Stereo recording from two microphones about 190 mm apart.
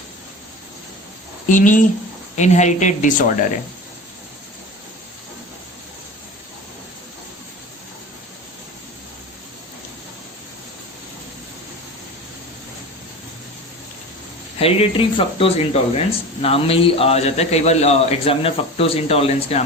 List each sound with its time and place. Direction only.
1.5 s a man's voice: 45° left (ahead or behind)
14.6 s a man's voice: 30° left (ahead or behind)